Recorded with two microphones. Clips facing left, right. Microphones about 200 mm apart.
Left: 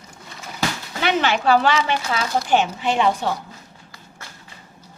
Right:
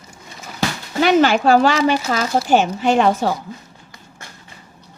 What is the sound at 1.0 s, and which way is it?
Speech, 40° right (ahead or behind).